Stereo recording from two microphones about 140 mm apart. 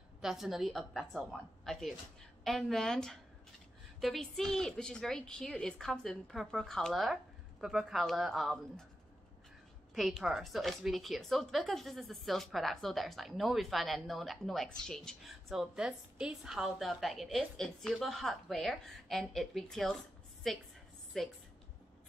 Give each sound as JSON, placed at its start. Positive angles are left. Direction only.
{"t": 0.2, "sound": "a woman's voice", "side_deg": 0}
{"t": 9.9, "sound": "a woman's voice", "side_deg": 0}